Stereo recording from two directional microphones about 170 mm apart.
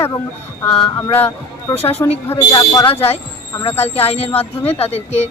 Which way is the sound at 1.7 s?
35° left (ahead or behind).